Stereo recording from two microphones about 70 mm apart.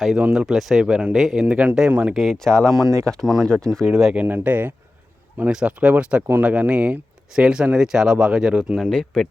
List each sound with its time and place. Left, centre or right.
0.3 s speech: centre
1.5 s speech: centre
2.1 s speech: centre
2.9 s speech: right
3.2 s speech: centre
4.1 s speech: right
5.5 s speech: centre
8.9 s speech: centre